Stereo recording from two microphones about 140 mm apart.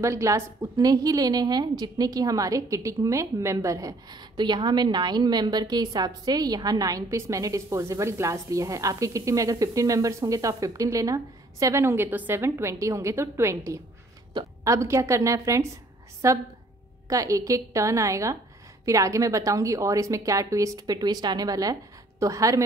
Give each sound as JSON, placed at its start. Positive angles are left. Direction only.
{"t": 0.0, "sound": "a woman's voice", "side_deg": -20}